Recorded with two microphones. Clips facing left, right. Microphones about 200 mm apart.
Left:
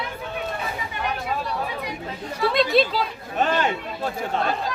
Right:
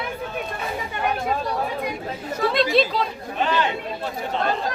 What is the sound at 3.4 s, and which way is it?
Speech, 45° left (ahead or behind).